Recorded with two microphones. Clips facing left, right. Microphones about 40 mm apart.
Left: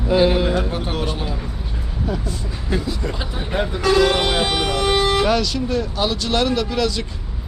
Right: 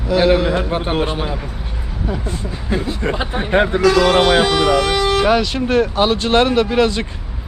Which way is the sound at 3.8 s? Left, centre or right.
Right.